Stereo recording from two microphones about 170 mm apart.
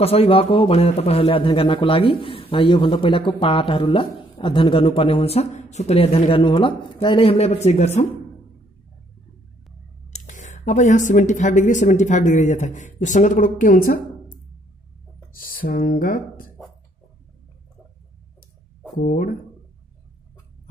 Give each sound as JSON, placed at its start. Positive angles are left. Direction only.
{"t": 0.0, "sound": "a man's voice", "side_deg": 35}
{"t": 10.1, "sound": "speech", "side_deg": 45}
{"t": 15.4, "sound": "speech", "side_deg": 55}
{"t": 18.9, "sound": "speech", "side_deg": 55}